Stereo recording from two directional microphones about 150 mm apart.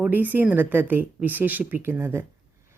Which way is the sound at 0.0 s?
10° right (ahead or behind).